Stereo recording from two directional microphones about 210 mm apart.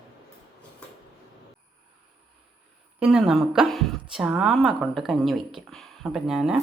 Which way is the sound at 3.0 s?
5° right (ahead or behind).